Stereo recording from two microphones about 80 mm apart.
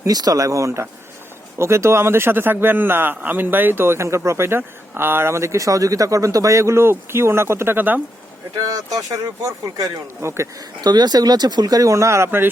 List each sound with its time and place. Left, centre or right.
0.0 s a man's voice: right
8.6 s speech: right
10.2 s speech: right
10.8 s speech: right